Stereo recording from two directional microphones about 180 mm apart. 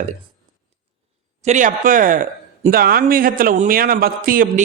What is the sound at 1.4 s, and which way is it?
Speech, 40° right (ahead or behind).